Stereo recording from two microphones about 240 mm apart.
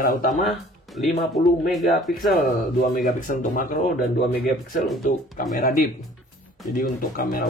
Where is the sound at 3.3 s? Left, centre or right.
Left.